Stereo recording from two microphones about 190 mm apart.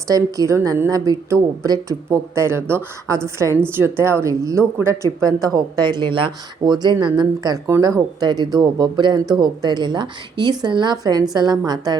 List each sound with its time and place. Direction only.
0.1 s a woman's voice: 15° right (ahead or behind)